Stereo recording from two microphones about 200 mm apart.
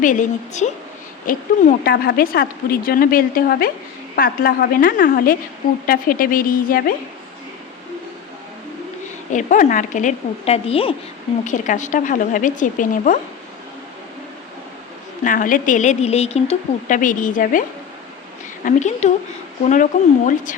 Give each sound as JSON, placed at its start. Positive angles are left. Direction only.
{"t": 0.0, "sound": "a woman's voice", "side_deg": 40}
{"t": 1.3, "sound": "speech", "side_deg": 50}
{"t": 9.3, "sound": "a woman's voice", "side_deg": 40}
{"t": 11.4, "sound": "a woman's voice", "side_deg": 40}
{"t": 15.2, "sound": "a woman's voice", "side_deg": 40}
{"t": 18.6, "sound": "a woman's voice", "side_deg": 35}